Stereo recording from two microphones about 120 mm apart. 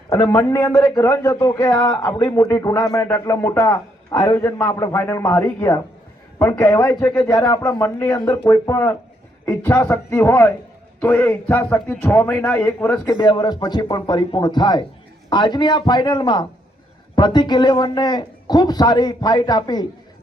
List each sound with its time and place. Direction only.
0.1 s a man's voice: 25° left (ahead or behind)
13.1 s speech: 35° left (ahead or behind)